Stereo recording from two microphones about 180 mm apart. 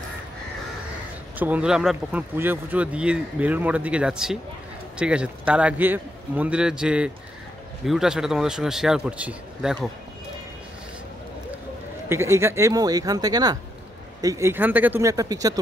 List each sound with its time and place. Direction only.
1.4 s a man's voice: 5° right (ahead or behind)
12.1 s speech: 15° right (ahead or behind)